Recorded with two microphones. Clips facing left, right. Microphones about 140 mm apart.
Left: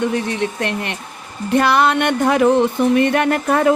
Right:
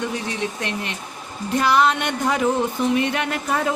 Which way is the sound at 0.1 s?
60° left (ahead or behind).